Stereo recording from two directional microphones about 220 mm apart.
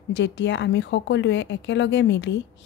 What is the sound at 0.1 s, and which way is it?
A woman's voice, 55° left (ahead or behind).